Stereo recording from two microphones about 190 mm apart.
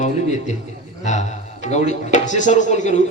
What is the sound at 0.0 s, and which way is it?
Speech, 35° left (ahead or behind).